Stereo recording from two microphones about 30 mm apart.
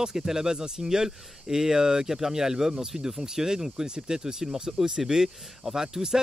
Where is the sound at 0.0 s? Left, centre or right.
Right.